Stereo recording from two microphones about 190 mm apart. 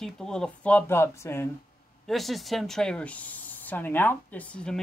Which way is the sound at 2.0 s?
Centre (ahead or behind).